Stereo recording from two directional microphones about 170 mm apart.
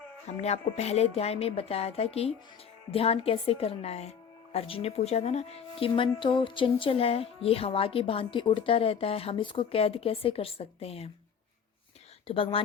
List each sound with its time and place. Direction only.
0.4 s a woman's voice: 40° left (ahead or behind)
12.3 s a woman's voice: 30° left (ahead or behind)